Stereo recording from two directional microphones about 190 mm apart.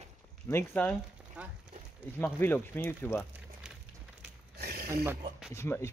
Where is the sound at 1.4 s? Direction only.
5° right (ahead or behind).